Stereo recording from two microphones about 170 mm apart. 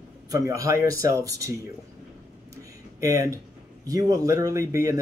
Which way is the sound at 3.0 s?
20° right (ahead or behind).